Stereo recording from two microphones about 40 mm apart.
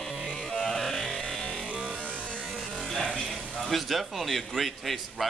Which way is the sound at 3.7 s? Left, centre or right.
Centre.